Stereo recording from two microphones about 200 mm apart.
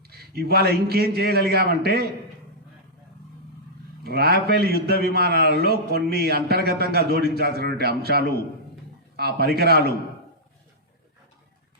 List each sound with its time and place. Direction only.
0.1 s a man's voice: 50° right (ahead or behind)
4.0 s a man's voice: 50° right (ahead or behind)